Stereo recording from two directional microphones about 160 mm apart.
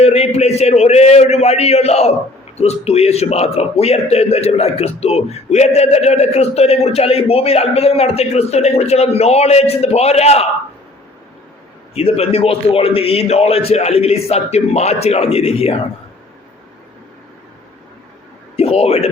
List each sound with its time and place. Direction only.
0.0 s a man's voice: 40° left (ahead or behind)
11.9 s a man's voice: 40° left (ahead or behind)
18.5 s a man's voice: 40° left (ahead or behind)